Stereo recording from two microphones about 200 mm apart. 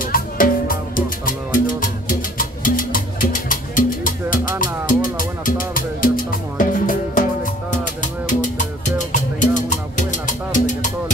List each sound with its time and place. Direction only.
0.0 s music: 45° left (ahead or behind)